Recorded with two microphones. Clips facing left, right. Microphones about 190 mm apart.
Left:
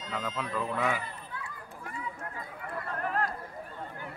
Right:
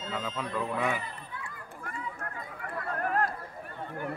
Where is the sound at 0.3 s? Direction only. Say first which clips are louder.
Even; 5° left (ahead or behind).